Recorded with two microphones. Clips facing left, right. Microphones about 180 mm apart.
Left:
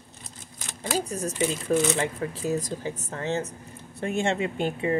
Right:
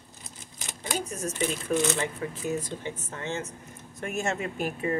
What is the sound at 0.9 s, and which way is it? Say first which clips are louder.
A woman's voice: left 4 dB; 35° left (ahead or behind).